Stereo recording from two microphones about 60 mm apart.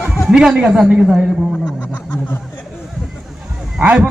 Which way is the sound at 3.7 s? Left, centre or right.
Centre.